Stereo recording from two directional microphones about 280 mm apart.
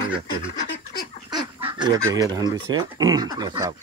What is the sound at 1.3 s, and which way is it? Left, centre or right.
Goose, centre.